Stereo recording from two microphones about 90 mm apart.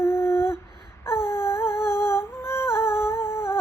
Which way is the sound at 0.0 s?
30° left (ahead or behind).